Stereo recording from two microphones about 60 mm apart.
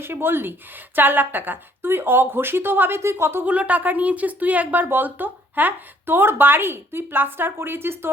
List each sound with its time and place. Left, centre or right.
0.0 s speech: right
3.0 s speech: right
3.4 s speech: right